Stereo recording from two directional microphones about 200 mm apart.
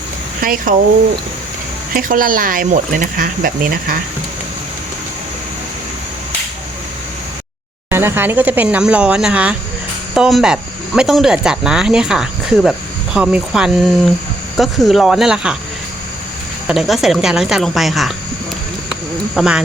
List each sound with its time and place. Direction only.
0.4 s speech: 45° right (ahead or behind)
1.9 s speech: 45° right (ahead or behind)
7.9 s speech: 10° right (ahead or behind)
16.6 s speech: centre (ahead or behind)
19.4 s speech: 5° right (ahead or behind)